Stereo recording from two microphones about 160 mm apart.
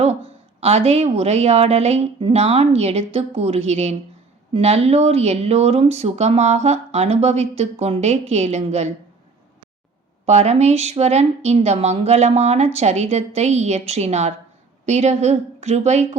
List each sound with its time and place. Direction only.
0.0 s speech: 40° right (ahead or behind)
10.2 s a woman's voice: 45° right (ahead or behind)